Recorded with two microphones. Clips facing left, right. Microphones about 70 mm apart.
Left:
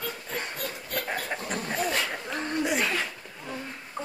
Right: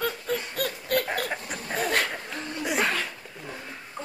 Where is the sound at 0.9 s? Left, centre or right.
Right.